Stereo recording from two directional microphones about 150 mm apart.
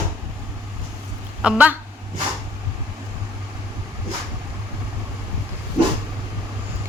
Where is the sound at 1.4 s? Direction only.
10° right (ahead or behind).